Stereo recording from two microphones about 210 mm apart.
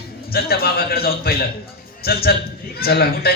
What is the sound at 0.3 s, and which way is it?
Speech, 45° left (ahead or behind).